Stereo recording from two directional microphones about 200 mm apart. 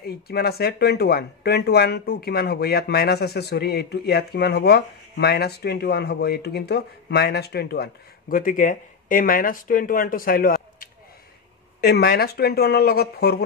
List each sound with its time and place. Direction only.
0.0 s speech: 50° left (ahead or behind)